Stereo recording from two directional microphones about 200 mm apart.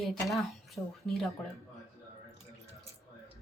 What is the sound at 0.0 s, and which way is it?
A woman's voice, centre (ahead or behind).